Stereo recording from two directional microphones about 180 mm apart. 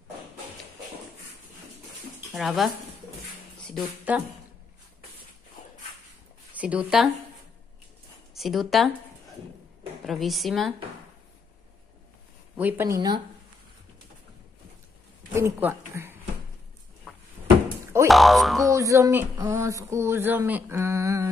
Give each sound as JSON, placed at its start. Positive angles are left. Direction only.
{"t": 2.3, "sound": "speech", "side_deg": 0}
{"t": 4.1, "sound": "a sound", "side_deg": -10}
{"t": 6.5, "sound": "speech", "side_deg": -5}
{"t": 8.4, "sound": "speech", "side_deg": 0}
{"t": 10.0, "sound": "speech", "side_deg": 0}
{"t": 12.5, "sound": "a sound", "side_deg": -10}
{"t": 15.3, "sound": "speech", "side_deg": -15}
{"t": 17.1, "sound": "drawer open or close", "side_deg": 0}
{"t": 18.0, "sound": "speech", "side_deg": 0}
{"t": 18.6, "sound": "a sound", "side_deg": -15}